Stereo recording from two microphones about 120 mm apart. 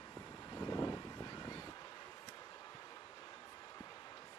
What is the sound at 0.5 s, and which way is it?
Vehicle, 35° left (ahead or behind).